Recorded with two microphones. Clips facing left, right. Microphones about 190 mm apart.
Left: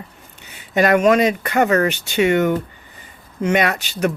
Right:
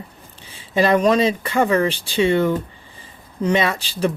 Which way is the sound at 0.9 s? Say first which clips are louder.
Left 3 dB; 30° right (ahead or behind).